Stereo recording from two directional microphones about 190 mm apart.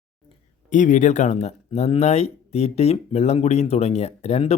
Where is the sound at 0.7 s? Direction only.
40° left (ahead or behind).